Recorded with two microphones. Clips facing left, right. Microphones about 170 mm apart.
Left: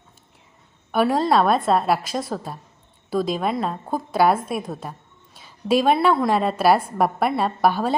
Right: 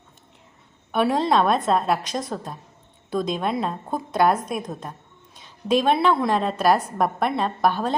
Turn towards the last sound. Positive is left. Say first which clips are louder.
# left 2 dB
turn(degrees=5)  # may be behind; listen again after turning